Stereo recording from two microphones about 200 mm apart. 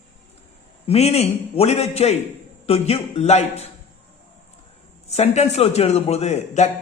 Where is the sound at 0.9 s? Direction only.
30° left (ahead or behind).